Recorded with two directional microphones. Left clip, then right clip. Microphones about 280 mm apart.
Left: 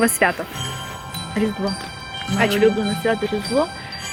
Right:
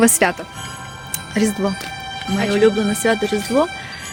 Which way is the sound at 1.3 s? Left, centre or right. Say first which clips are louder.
Right 3 dB; right.